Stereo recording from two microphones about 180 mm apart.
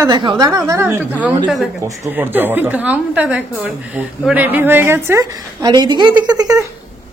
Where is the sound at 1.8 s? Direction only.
10° right (ahead or behind).